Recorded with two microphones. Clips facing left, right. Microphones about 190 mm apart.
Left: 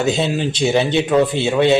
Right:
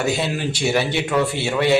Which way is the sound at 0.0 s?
20° left (ahead or behind).